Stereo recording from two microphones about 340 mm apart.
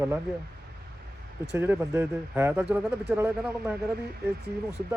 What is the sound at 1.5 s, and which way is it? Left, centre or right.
Speech, centre.